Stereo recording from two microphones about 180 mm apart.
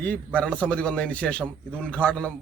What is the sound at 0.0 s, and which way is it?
A man's voice, 5° left (ahead or behind).